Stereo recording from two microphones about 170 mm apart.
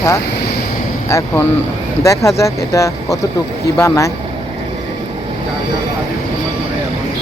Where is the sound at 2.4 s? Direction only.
20° left (ahead or behind).